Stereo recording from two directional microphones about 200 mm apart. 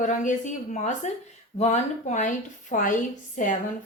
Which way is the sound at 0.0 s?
40° left (ahead or behind).